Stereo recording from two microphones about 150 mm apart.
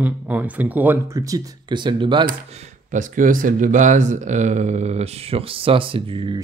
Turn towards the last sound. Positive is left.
turn(degrees=-35)  # may be behind; listen again after turning